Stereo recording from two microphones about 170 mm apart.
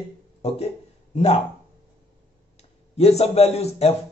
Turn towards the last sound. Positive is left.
turn(degrees=35)  # may be behind; listen again after turning